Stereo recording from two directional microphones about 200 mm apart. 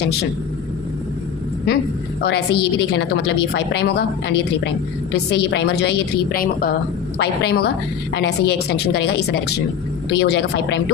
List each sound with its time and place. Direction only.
2.2 s a woman's voice: 55° left (ahead or behind)